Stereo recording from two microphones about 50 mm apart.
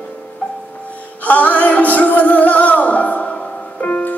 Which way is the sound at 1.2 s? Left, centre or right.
Left.